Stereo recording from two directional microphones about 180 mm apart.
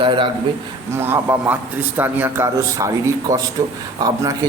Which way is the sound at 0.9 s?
15° right (ahead or behind).